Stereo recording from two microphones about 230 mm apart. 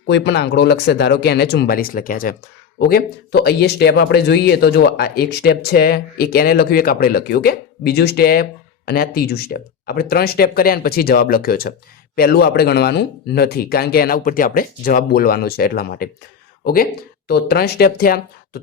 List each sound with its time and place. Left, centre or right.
0.1 s speech: left